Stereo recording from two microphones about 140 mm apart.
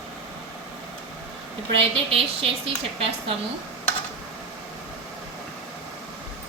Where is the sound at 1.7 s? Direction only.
40° right (ahead or behind).